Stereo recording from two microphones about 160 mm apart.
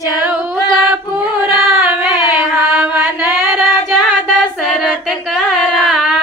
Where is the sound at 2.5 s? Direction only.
15° right (ahead or behind).